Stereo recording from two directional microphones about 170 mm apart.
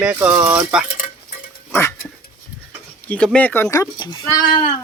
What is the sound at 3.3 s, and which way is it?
Speech, 10° left (ahead or behind).